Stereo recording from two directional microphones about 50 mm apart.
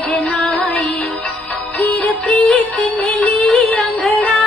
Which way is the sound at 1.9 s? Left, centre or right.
Left.